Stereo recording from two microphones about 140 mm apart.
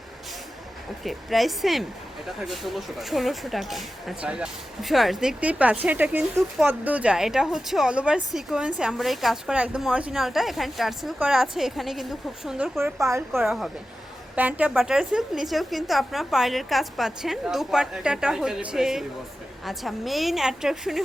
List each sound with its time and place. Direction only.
1.0 s speech: centre (ahead or behind)
12.8 s speech: 20° right (ahead or behind)
13.3 s speech: centre (ahead or behind)